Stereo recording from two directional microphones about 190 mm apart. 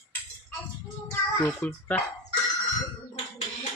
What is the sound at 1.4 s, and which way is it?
Speech, 10° left (ahead or behind).